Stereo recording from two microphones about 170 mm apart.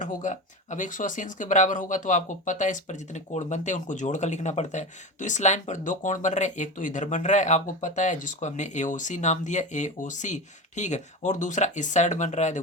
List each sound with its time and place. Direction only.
0.0 s speech: 50° left (ahead or behind)